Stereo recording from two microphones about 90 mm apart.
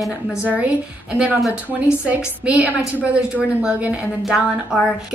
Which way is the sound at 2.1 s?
15° right (ahead or behind).